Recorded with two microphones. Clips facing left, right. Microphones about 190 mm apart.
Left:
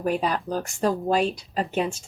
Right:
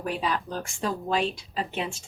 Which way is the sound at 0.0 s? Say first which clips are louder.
Left 4 dB; 45° left (ahead or behind).